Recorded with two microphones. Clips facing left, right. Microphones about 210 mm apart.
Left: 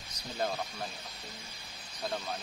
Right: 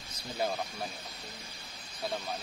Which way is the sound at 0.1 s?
10° right (ahead or behind).